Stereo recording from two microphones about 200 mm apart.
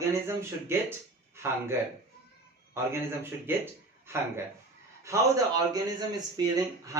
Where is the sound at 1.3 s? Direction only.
10° right (ahead or behind).